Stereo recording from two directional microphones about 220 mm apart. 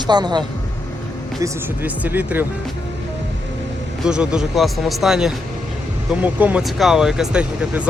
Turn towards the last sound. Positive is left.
turn(degrees=-5)  # may be behind; listen again after turning